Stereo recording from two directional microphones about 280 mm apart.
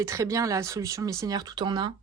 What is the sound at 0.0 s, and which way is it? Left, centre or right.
A woman's voice, centre.